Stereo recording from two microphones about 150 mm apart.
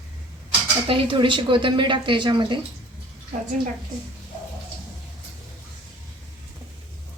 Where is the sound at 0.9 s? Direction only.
35° right (ahead or behind).